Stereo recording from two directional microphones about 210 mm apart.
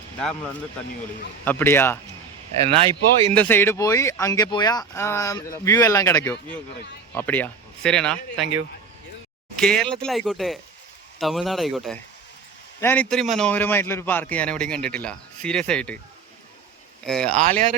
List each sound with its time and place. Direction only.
1.5 s speech: 10° left (ahead or behind)
2.6 s speech: 25° right (ahead or behind)
3.3 s speech: 10° left (ahead or behind)
9.6 s speech: 5° left (ahead or behind)
17.1 s speech: 5° left (ahead or behind)